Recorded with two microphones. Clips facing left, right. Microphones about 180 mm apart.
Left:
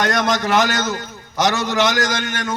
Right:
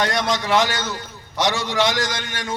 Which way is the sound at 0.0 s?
45° left (ahead or behind).